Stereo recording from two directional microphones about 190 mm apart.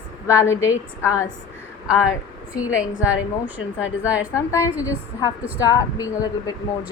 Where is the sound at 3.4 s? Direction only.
5° right (ahead or behind).